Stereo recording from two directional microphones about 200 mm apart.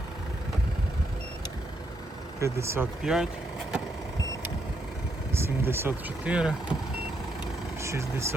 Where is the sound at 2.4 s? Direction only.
15° right (ahead or behind).